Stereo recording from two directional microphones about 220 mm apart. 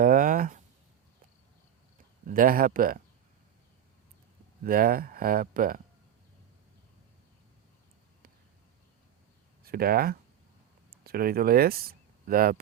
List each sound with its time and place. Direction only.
0.0 s a sound: 40° right (ahead or behind)
2.2 s speech: 40° right (ahead or behind)
4.6 s speech: 40° right (ahead or behind)
9.6 s speech: 45° right (ahead or behind)